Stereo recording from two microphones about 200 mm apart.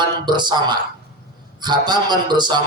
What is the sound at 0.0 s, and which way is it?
A man's voice, 20° right (ahead or behind).